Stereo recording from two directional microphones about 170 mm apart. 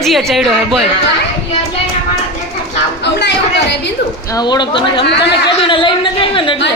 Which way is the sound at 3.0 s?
90° left.